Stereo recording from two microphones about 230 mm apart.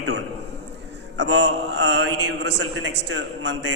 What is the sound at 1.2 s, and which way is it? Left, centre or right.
A man's voice, right.